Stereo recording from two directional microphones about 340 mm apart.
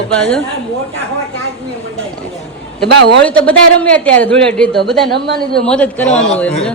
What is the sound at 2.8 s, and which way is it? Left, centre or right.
Speech, right.